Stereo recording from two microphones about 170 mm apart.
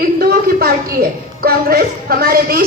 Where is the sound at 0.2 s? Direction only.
60° right (ahead or behind).